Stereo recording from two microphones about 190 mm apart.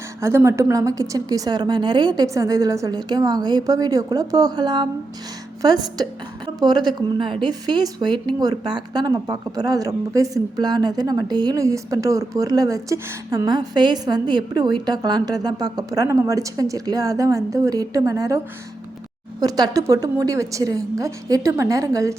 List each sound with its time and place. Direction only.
0.2 s speech: 15° right (ahead or behind)
19.4 s a woman's voice: 20° right (ahead or behind)